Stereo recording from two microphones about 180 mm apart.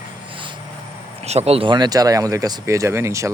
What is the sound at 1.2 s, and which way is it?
Speech, 35° right (ahead or behind).